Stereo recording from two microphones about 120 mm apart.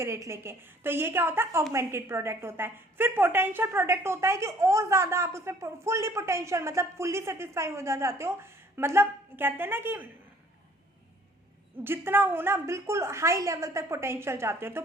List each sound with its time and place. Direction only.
0.0 s a woman's voice: 25° right (ahead or behind)
11.8 s a woman's voice: 20° right (ahead or behind)